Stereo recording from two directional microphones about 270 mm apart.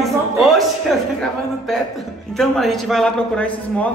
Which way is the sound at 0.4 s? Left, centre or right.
Centre.